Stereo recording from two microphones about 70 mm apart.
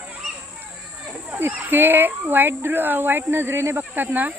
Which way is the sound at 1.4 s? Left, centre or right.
Right.